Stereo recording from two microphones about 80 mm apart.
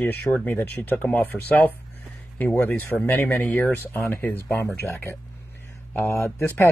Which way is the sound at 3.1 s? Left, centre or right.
Left.